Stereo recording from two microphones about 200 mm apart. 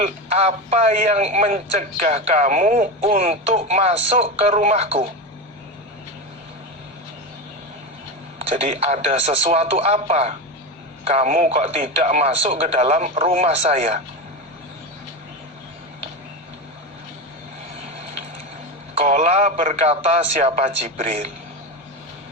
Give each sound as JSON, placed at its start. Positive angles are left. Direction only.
{"t": 0.0, "sound": "a man's voice", "side_deg": -30}
{"t": 8.4, "sound": "a man's voice", "side_deg": -30}
{"t": 18.9, "sound": "a man's voice", "side_deg": -35}